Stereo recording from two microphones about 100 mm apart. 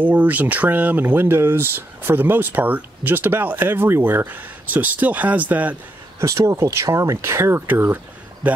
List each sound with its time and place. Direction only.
0.0 s speech: 15° right (ahead or behind)
6.1 s speech: 30° right (ahead or behind)